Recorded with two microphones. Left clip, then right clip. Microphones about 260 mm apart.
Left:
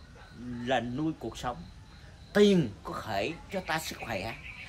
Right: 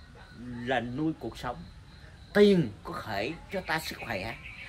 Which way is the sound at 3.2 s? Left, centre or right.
Left.